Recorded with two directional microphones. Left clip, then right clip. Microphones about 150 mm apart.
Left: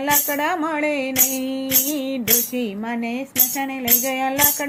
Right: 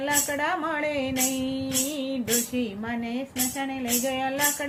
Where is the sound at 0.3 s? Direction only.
50° left (ahead or behind).